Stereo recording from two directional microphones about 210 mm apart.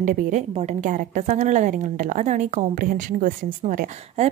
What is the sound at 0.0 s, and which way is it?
A woman's voice, 35° right (ahead or behind).